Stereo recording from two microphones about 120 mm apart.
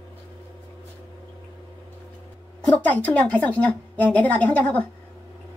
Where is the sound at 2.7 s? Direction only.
15° left (ahead or behind).